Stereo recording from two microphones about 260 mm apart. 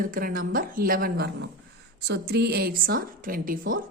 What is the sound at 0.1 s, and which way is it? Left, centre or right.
A woman's voice, right.